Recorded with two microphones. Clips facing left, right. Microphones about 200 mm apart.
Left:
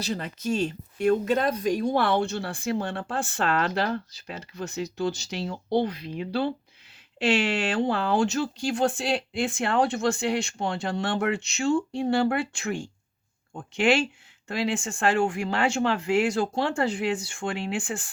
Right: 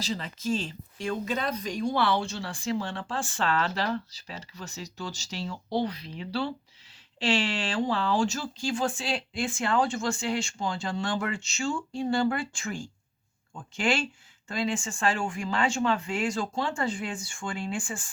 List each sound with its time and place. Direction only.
0.0 s speech: 55° left (ahead or behind)
7.7 s speech: 60° left (ahead or behind)